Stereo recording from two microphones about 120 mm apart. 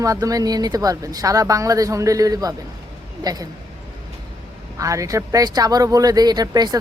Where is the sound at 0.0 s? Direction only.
30° right (ahead or behind).